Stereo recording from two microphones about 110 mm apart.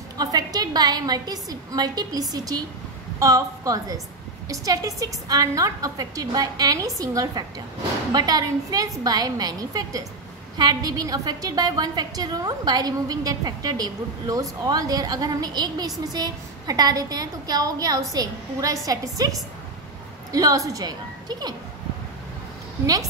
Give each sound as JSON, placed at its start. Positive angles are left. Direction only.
{"t": 0.2, "sound": "a woman's voice", "side_deg": -35}